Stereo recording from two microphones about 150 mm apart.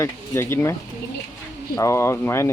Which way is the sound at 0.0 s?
15° left (ahead or behind).